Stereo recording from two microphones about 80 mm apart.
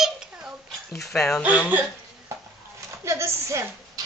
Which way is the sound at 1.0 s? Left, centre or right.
Centre.